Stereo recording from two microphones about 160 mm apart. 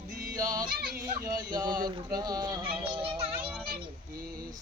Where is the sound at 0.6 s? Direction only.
65° right (ahead or behind).